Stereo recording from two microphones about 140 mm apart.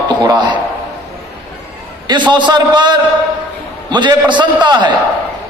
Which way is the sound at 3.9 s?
35° right (ahead or behind).